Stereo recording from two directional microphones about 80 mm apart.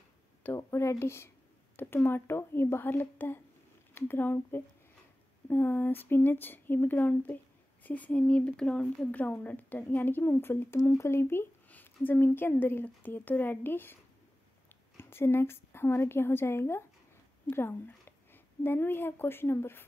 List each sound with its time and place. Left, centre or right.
0.6 s a woman's voice: left
15.0 s a woman's voice: left